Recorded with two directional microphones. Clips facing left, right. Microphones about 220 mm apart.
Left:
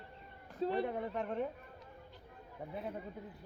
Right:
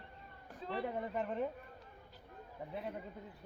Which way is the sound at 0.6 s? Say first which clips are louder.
Left 9 dB; 35° left (ahead or behind).